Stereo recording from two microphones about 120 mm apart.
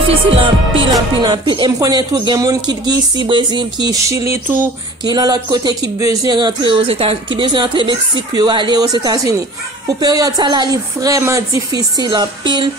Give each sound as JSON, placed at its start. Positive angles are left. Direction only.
{"t": 0.1, "sound": "music", "side_deg": -50}
{"t": 1.2, "sound": "speech", "side_deg": -40}